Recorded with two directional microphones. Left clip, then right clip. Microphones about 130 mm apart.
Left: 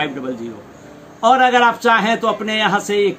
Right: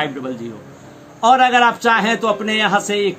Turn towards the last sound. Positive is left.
turn(degrees=-35)  # may be behind; listen again after turning